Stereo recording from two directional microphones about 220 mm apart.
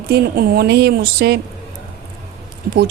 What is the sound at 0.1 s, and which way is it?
A woman's voice, 45° right (ahead or behind).